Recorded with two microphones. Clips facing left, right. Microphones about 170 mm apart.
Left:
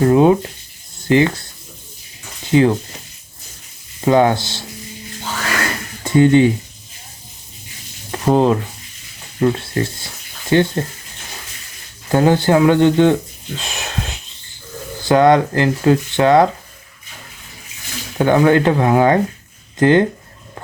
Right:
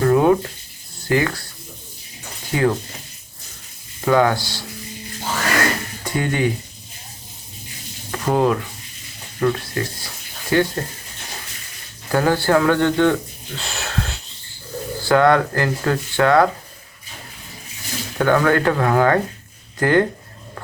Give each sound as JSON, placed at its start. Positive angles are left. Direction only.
{"t": 0.0, "sound": "a sound", "side_deg": 20}
{"t": 1.0, "sound": "speech", "side_deg": 20}
{"t": 2.5, "sound": "speech", "side_deg": 20}
{"t": 4.0, "sound": "speech", "side_deg": 25}
{"t": 6.1, "sound": "speech", "side_deg": 25}
{"t": 8.2, "sound": "speech", "side_deg": 25}
{"t": 12.1, "sound": "speech", "side_deg": 20}
{"t": 13.6, "sound": "wheeze", "side_deg": 15}
{"t": 15.0, "sound": "speech", "side_deg": 20}
{"t": 18.2, "sound": "speech", "side_deg": 20}